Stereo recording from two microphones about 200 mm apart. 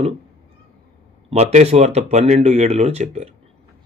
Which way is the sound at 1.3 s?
35° right (ahead or behind).